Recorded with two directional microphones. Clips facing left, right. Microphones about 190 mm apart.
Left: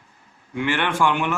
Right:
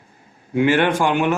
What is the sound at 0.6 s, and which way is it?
Speech, 40° right (ahead or behind).